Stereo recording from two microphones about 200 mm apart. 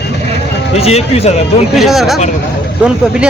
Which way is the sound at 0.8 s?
30° left (ahead or behind).